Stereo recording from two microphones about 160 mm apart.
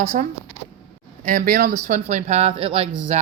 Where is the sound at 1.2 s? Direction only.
60° right (ahead or behind); by 2.8 s 35° right (ahead or behind).